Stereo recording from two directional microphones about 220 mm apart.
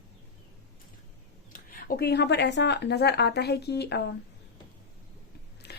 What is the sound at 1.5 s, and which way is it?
Speech, 40° left (ahead or behind).